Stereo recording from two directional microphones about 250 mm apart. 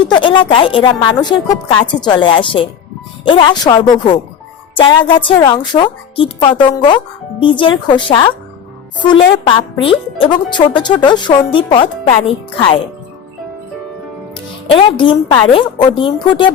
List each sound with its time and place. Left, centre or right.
0.0 s speech: centre
14.7 s speech: centre